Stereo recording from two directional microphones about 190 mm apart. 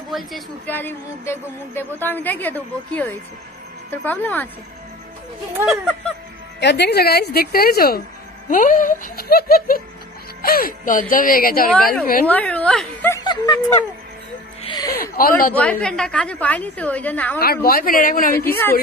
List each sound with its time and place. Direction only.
0.1 s speech: centre (ahead or behind)
0.7 s a woman's voice: 10° left (ahead or behind)
5.7 s speech: 5° left (ahead or behind)
6.6 s a woman's voice: 65° left (ahead or behind)
12.3 s a woman's voice: 5° left (ahead or behind)
13.2 s snicker: 20° left (ahead or behind)
14.6 s music: 25° left (ahead or behind)
15.0 s speech: 50° left (ahead or behind)
15.5 s a woman's voice: 5° left (ahead or behind)
17.4 s speech: 55° left (ahead or behind)
18.4 s a woman's voice: 10° left (ahead or behind)